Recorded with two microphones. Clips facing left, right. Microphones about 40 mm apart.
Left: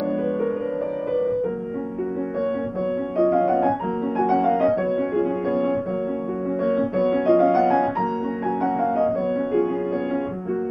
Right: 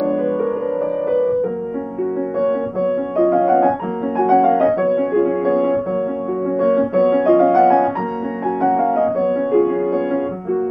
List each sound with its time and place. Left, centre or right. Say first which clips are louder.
1.1 s music: right 5 dB; centre
3.2 s music: right 5 dB; centre
6.6 s piano: right 6 dB; centre
8.6 s music: right 6 dB; centre